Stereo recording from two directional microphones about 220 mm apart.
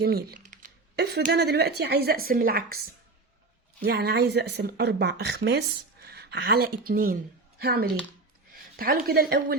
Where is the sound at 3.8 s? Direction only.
45° right (ahead or behind).